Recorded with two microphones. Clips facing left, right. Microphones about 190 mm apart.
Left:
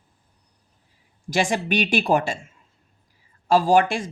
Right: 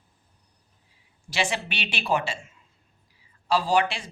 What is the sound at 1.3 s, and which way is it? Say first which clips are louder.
Speech: left 6 dB; 45° left (ahead or behind).